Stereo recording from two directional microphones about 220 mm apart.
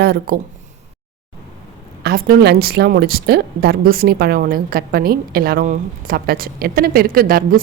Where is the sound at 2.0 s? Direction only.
45° right (ahead or behind).